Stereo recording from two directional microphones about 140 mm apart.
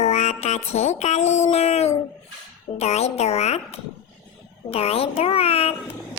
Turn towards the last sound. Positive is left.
turn(degrees=45)  # may be behind; listen again after turning